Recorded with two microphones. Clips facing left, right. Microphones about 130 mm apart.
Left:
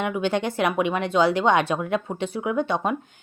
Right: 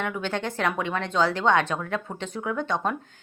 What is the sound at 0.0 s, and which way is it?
Speech, 15° left (ahead or behind).